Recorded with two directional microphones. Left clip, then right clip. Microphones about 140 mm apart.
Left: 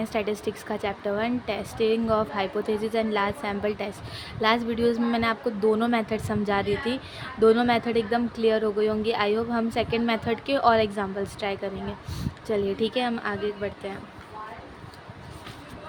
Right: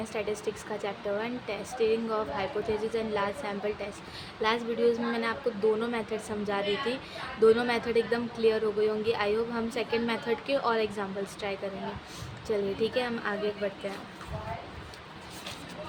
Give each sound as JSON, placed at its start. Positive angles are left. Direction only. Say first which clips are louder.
{"t": 0.0, "sound": "a woman's voice", "louder": "left 5 dB", "side_deg": 35}